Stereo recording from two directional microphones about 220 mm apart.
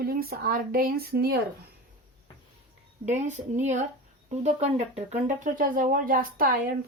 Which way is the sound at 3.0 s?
35° right (ahead or behind).